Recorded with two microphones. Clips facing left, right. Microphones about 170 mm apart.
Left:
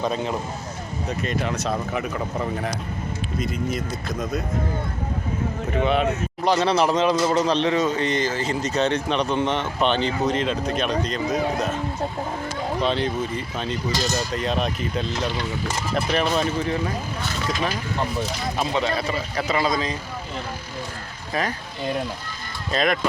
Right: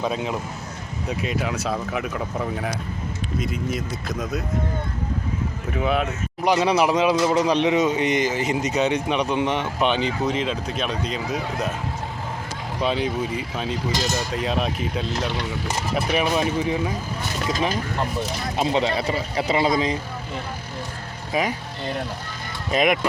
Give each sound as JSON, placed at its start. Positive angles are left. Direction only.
{"t": 0.0, "sound": "speech", "side_deg": -5}
{"t": 5.8, "sound": "a man's voice", "side_deg": -5}
{"t": 12.8, "sound": "a man's voice", "side_deg": -5}
{"t": 18.5, "sound": "speech", "side_deg": -25}
{"t": 21.3, "sound": "a man's voice", "side_deg": -15}
{"t": 22.7, "sound": "a man's voice", "side_deg": -15}